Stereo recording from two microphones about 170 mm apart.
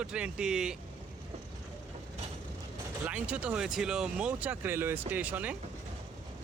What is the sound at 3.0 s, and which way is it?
Speech, 10° right (ahead or behind).